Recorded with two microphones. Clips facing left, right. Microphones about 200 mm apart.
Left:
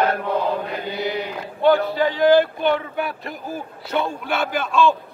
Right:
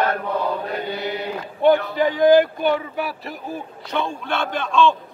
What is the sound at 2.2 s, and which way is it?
A man's voice, 15° right (ahead or behind).